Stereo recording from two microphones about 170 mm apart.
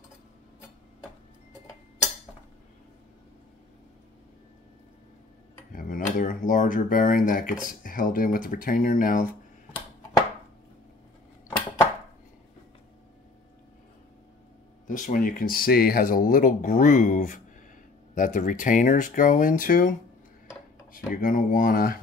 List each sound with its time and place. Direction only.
5.7 s speech: 55° left (ahead or behind)
14.9 s speech: 50° left (ahead or behind)